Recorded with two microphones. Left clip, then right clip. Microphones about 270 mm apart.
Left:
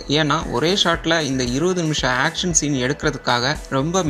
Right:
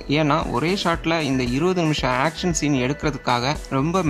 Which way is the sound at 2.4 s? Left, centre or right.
Right.